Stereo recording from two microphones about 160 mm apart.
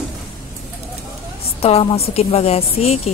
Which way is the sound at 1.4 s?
40° left (ahead or behind).